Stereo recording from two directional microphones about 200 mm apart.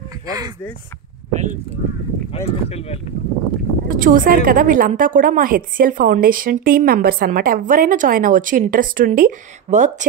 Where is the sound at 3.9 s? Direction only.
45° right (ahead or behind).